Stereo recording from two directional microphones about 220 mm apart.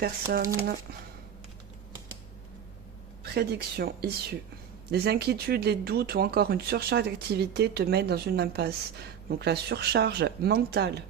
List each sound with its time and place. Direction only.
0.0 s speech: 45° right (ahead or behind)
3.3 s speech: 45° right (ahead or behind)